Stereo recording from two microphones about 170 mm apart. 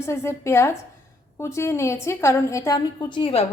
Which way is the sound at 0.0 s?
15° left (ahead or behind).